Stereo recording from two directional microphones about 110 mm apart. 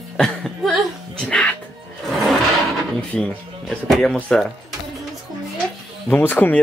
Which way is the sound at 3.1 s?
5° left (ahead or behind).